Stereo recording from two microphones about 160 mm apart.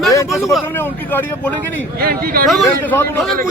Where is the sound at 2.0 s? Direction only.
65° right (ahead or behind).